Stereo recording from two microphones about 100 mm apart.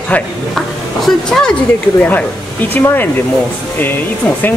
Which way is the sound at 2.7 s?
20° left (ahead or behind).